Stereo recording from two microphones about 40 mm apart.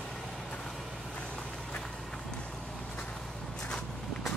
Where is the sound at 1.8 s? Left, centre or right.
Centre.